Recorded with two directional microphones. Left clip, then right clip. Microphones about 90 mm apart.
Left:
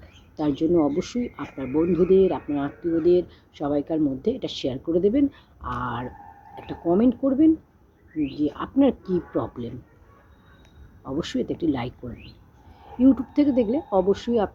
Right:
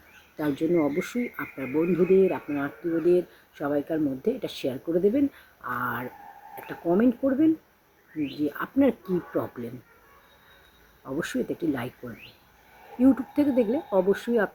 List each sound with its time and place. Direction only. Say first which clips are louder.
0.3 s speech: left 3 dB; 30° right (ahead or behind)
5.6 s speech: even; 35° right (ahead or behind)
8.2 s speech: left 3 dB; 30° right (ahead or behind)
11.1 s speech: left 2 dB; 30° right (ahead or behind)
13.1 s speech: left 3 dB; 30° right (ahead or behind)